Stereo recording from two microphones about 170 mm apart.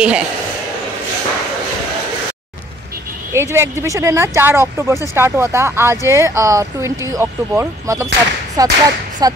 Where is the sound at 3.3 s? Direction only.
15° right (ahead or behind).